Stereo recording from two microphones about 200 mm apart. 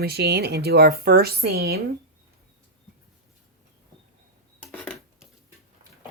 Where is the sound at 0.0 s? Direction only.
55° right (ahead or behind).